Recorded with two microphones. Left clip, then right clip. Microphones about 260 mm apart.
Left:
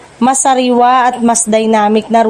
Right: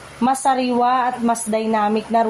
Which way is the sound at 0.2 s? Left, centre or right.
Left.